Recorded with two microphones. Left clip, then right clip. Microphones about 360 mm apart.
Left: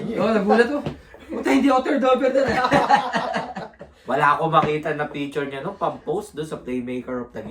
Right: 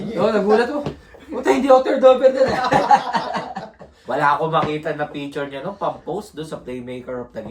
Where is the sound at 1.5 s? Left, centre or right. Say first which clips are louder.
Right 5 dB; centre.